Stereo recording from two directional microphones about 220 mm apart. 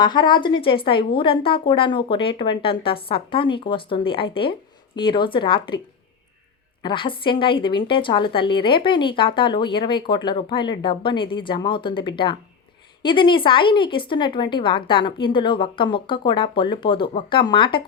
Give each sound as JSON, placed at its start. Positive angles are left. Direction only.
{"t": 0.0, "sound": "a woman's voice", "side_deg": 20}
{"t": 6.8, "sound": "a woman's voice", "side_deg": 20}